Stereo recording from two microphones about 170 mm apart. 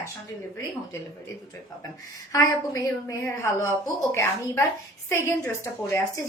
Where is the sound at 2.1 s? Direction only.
20° left (ahead or behind).